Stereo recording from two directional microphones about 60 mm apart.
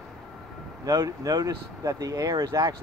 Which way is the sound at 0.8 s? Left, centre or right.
Right.